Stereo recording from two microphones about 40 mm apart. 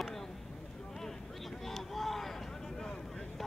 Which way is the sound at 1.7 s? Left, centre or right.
Centre.